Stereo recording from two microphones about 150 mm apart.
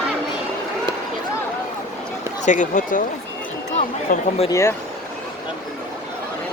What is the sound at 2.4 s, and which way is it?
Speech, 55° left (ahead or behind).